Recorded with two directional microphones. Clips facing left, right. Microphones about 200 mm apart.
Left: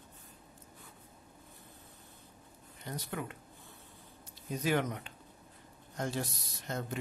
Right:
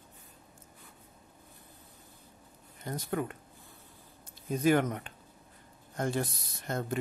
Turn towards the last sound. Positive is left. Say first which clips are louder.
# right 4 dB
turn(degrees=-50)  # may be behind; listen again after turning